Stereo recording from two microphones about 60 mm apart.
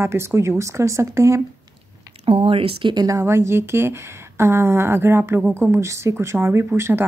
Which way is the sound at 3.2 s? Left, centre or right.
Right.